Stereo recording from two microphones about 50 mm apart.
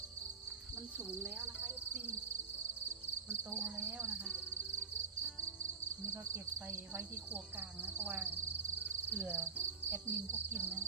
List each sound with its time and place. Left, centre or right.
3.5 s speech: right
6.3 s cricket: right
7.8 s cricket: right
9.2 s speech: right
9.9 s cricket: right